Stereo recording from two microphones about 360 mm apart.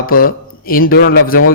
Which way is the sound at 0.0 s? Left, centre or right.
Left.